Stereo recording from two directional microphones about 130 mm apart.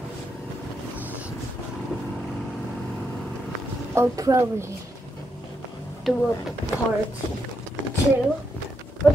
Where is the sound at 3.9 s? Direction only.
25° right (ahead or behind).